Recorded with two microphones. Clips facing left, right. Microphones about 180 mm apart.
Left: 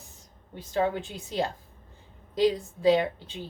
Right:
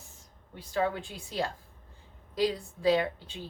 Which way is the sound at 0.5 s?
25° left (ahead or behind).